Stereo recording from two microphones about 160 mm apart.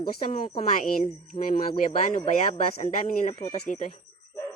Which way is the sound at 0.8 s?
45° left (ahead or behind).